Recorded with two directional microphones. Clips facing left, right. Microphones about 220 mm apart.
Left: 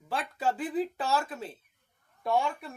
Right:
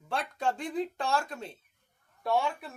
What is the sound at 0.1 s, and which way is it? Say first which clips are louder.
Speech: left 1 dB; 5° left (ahead or behind).